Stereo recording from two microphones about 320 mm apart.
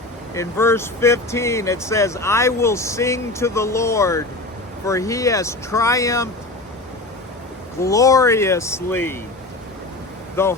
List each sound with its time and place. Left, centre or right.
0.3 s speech: centre
7.8 s speech: centre
10.4 s speech: centre